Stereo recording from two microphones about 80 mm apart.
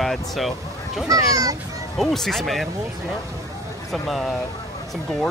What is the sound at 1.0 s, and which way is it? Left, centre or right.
Speech, right.